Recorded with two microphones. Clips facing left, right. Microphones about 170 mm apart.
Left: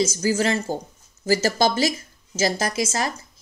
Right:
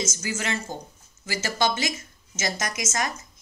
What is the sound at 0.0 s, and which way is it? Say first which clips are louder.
A woman's voice: left 9 dB; 35° left (ahead or behind).